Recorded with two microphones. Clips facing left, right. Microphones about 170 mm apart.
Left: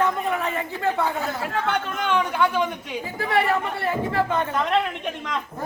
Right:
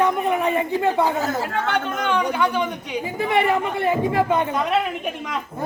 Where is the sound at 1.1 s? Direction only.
40° right (ahead or behind).